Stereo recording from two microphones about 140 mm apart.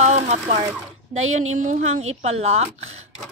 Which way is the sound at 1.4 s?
60° right (ahead or behind).